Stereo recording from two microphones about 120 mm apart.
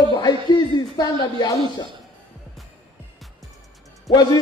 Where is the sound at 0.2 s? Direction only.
35° left (ahead or behind).